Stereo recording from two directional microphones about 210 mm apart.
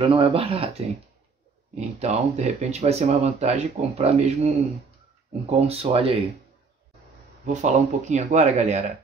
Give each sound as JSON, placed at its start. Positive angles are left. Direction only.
{"t": 0.0, "sound": "speech", "side_deg": -25}
{"t": 2.0, "sound": "speech", "side_deg": -30}
{"t": 7.4, "sound": "speech", "side_deg": -35}